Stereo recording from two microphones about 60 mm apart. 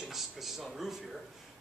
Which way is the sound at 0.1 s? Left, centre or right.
Centre.